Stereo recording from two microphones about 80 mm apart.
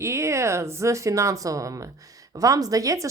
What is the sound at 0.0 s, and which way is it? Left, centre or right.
Speech, right.